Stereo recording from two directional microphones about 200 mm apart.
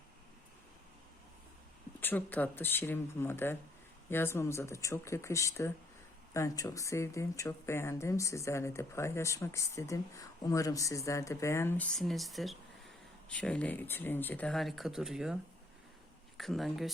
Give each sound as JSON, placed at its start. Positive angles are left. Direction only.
{"t": 2.0, "sound": "speech", "side_deg": 10}
{"t": 11.9, "sound": "speech", "side_deg": 0}
{"t": 16.4, "sound": "speech", "side_deg": 0}